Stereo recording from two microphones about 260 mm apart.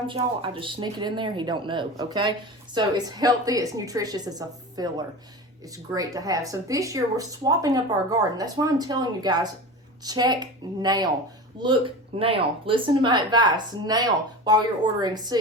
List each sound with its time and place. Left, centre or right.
0.1 s speech: centre